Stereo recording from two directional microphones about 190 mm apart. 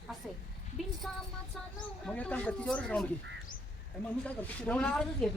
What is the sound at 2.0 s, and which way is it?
Speech, 5° left (ahead or behind).